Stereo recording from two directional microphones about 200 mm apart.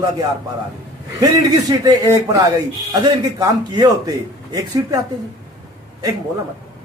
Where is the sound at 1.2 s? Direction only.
20° right (ahead or behind).